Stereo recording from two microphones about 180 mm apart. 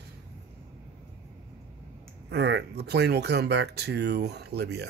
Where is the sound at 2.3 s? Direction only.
70° right (ahead or behind).